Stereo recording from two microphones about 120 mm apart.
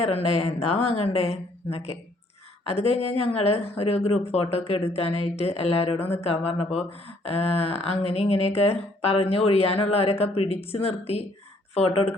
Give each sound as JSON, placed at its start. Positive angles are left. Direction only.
{"t": 0.0, "sound": "speech", "side_deg": 60}